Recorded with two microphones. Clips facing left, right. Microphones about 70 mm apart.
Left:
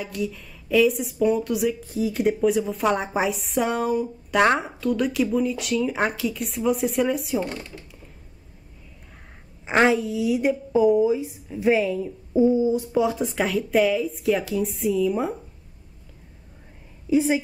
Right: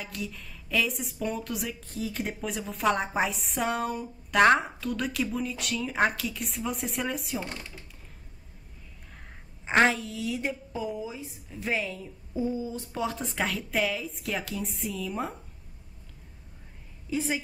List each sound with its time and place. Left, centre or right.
0.0 s a woman's voice: centre
9.7 s a woman's voice: centre
12.9 s a woman's voice: centre
17.1 s a woman's voice: centre